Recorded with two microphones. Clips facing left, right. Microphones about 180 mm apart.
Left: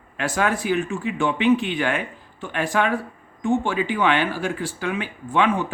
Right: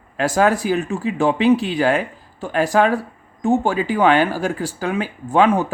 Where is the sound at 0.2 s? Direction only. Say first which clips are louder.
Right 6 dB; 40° right (ahead or behind).